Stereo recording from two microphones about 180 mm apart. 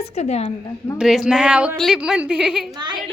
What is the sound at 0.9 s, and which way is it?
A woman's voice, 5° right (ahead or behind).